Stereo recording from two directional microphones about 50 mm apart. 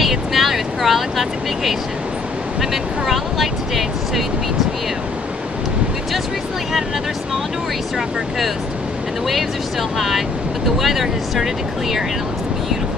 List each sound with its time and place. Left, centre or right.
0.0 s vehicle: centre
2.7 s speech: centre
9.3 s speech: centre